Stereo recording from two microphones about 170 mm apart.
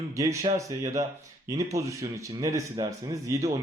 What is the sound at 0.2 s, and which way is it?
Speech, 20° right (ahead or behind).